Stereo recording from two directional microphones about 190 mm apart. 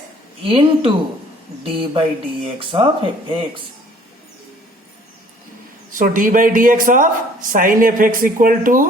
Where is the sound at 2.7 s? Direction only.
25° right (ahead or behind).